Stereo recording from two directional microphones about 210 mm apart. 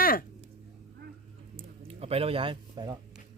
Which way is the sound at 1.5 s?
30° right (ahead or behind).